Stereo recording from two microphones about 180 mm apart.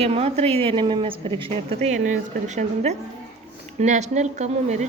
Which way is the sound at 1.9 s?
40° right (ahead or behind).